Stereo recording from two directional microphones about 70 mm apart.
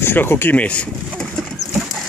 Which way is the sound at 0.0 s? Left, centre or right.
Left.